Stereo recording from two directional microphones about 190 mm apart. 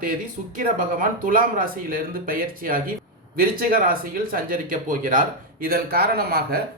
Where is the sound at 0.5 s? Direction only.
45° right (ahead or behind).